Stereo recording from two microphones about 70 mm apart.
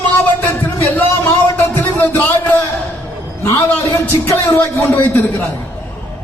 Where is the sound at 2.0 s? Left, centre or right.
Left.